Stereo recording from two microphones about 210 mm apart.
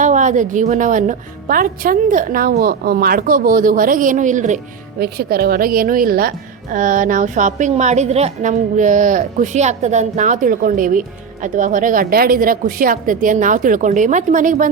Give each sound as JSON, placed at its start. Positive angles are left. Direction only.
{"t": 0.0, "sound": "a woman's voice", "side_deg": -35}